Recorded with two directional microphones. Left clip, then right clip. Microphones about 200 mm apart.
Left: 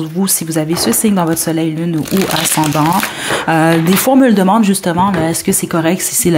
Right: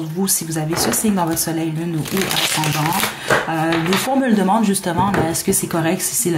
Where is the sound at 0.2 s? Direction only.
30° left (ahead or behind).